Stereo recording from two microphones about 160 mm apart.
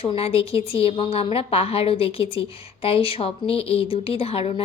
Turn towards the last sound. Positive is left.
turn(degrees=40)  # may be behind; listen again after turning